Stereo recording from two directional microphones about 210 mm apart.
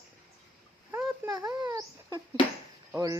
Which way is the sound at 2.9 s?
15° right (ahead or behind).